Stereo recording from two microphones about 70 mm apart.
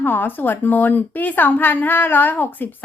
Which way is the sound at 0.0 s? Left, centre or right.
Left.